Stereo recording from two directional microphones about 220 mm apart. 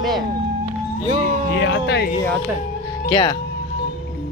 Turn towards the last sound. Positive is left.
turn(degrees=20)  # may be behind; listen again after turning